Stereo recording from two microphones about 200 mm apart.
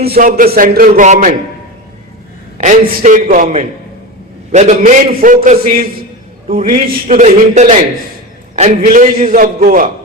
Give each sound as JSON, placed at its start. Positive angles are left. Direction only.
{"t": 0.1, "sound": "a man's voice", "side_deg": -45}
{"t": 2.6, "sound": "a man's voice", "side_deg": -35}